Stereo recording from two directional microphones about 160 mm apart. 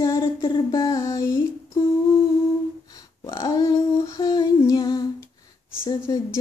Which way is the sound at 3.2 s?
20° left (ahead or behind).